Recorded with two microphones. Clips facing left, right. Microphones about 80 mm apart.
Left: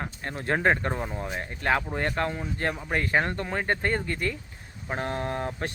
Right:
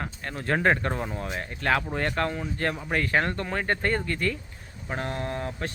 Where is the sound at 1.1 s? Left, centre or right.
Centre.